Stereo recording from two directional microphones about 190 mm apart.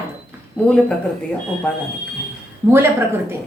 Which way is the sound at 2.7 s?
10° right (ahead or behind).